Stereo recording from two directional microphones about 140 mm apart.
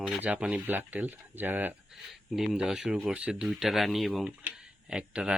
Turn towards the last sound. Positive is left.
turn(degrees=-5)  # may be behind; listen again after turning